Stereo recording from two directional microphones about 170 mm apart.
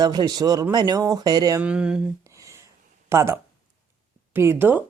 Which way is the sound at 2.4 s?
20° right (ahead or behind).